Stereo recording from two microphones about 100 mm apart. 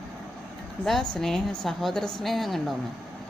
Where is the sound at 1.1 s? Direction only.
5° left (ahead or behind).